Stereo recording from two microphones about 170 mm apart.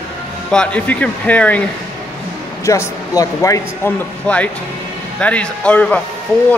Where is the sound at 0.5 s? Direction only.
5° left (ahead or behind).